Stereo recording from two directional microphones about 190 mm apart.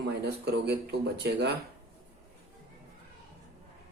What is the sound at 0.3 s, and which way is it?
Speech, 60° right (ahead or behind).